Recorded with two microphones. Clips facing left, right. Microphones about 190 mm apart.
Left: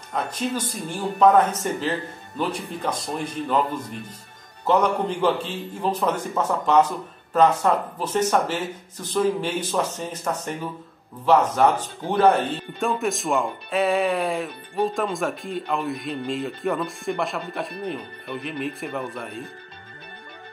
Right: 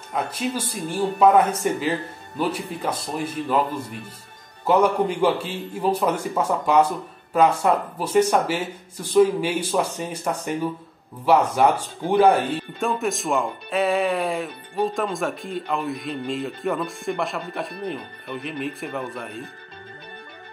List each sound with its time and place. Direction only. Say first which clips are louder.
0.1 s speech: even; 10° right (ahead or behind)